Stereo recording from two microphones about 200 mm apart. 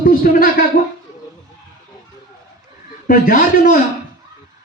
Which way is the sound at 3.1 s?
45° left (ahead or behind).